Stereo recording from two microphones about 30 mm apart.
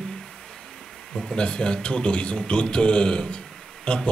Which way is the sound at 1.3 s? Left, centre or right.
Left.